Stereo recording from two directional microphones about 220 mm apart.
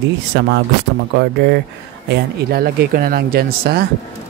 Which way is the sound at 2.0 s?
45° right (ahead or behind).